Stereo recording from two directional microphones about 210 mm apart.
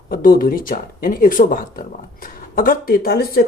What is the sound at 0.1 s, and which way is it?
Speech, 45° left (ahead or behind).